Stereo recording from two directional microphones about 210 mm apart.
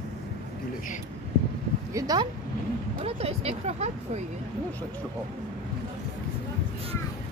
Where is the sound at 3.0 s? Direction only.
30° right (ahead or behind).